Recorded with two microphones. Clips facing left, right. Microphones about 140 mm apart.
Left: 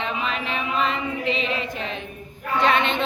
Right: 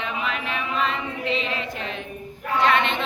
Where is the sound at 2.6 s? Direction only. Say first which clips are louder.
Even; 20° left (ahead or behind).